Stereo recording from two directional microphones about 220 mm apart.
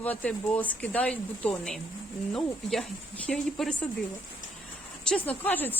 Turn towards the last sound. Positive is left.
turn(degrees=10)  # may be behind; listen again after turning